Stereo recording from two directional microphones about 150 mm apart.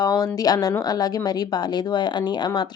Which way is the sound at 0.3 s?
25° left (ahead or behind).